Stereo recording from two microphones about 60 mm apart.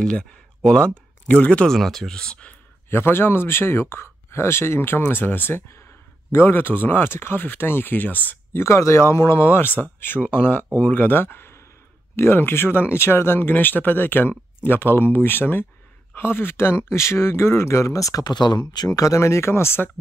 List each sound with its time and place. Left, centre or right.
0.0 s speech: centre
1.7 s speech: centre
2.9 s speech: left
8.5 s speech: left